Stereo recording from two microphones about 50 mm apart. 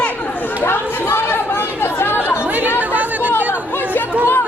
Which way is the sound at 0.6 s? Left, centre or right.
Left.